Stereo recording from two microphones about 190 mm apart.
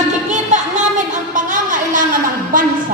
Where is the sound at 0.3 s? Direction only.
40° right (ahead or behind).